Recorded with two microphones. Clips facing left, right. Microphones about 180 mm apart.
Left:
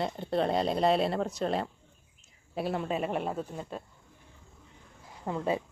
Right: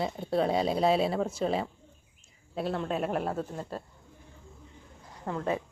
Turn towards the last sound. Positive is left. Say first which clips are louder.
# left 1 dB
turn(degrees=15)  # may be behind; listen again after turning